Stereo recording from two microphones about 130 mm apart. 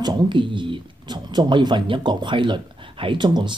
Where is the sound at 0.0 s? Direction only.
35° right (ahead or behind).